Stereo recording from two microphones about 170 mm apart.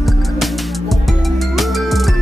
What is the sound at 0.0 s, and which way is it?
Music, centre (ahead or behind).